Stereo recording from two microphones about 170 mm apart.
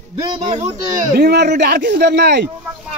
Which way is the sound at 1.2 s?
70° right (ahead or behind).